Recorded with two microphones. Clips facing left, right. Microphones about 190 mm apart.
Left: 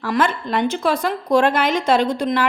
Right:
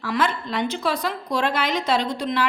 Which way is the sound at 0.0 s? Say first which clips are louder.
Left 4 dB; 50° left (ahead or behind).